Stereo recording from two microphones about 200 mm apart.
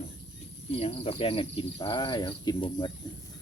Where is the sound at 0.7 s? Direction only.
30° left (ahead or behind).